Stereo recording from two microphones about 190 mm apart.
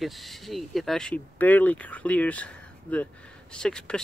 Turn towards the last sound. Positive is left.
turn(degrees=5)  # may be behind; listen again after turning